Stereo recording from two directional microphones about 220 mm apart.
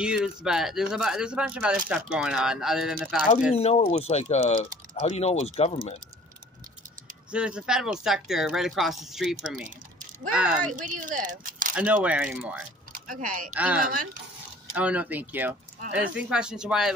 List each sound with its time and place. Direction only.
0.0 s speech: 5° right (ahead or behind)
3.5 s speech: 25° left (ahead or behind)
7.2 s speech: 5° right (ahead or behind)
10.7 s speech: 35° right (ahead or behind)
11.7 s speech: 5° right (ahead or behind)
12.9 s speech: 40° right (ahead or behind)
14.7 s speech: 5° right (ahead or behind)